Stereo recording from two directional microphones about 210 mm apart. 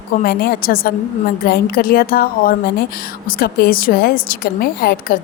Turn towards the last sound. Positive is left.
turn(degrees=45)  # may be behind; listen again after turning